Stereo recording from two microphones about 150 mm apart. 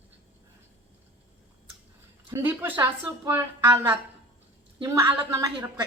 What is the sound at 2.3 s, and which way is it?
Speech, 15° right (ahead or behind).